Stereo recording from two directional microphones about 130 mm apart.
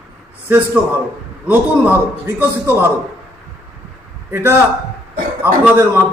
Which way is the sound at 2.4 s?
15° right (ahead or behind).